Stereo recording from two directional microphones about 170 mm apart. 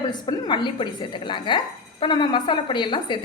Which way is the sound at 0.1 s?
25° left (ahead or behind).